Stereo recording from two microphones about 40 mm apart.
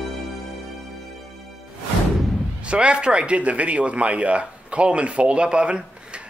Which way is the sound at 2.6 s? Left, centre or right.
Right.